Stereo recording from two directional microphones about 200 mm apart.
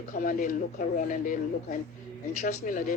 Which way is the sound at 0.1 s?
45° left (ahead or behind).